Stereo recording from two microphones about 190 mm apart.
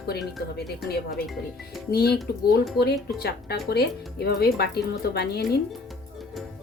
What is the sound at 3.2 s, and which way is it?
Speech, 55° left (ahead or behind).